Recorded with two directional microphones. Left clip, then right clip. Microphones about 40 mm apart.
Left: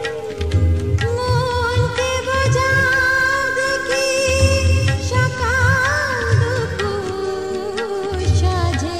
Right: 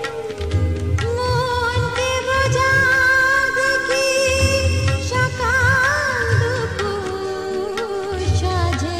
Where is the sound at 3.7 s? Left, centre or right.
Left.